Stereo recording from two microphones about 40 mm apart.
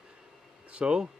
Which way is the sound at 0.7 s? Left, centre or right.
Right.